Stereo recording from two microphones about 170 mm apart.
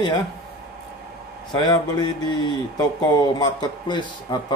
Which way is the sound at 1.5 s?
25° left (ahead or behind).